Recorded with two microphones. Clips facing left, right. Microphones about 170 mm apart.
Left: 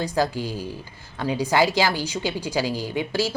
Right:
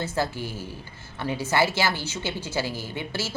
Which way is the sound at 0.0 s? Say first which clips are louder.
Left 4 dB; 15° left (ahead or behind).